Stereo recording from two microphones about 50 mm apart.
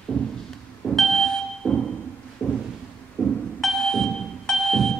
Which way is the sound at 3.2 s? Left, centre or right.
Left.